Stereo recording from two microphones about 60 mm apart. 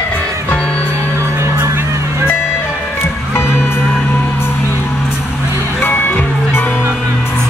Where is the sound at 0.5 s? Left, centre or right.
Centre.